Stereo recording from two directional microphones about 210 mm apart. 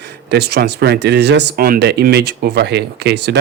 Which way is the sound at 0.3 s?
50° right (ahead or behind).